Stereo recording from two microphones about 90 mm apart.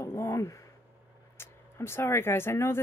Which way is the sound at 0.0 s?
30° left (ahead or behind).